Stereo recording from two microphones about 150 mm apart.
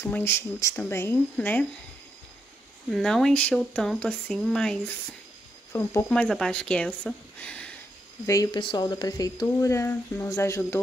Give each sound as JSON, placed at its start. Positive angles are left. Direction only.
{"t": 0.0, "sound": "speech", "side_deg": 15}
{"t": 2.9, "sound": "speech", "side_deg": 5}
{"t": 5.7, "sound": "speech", "side_deg": 15}
{"t": 6.0, "sound": "speech", "side_deg": 5}
{"t": 8.3, "sound": "speech", "side_deg": 25}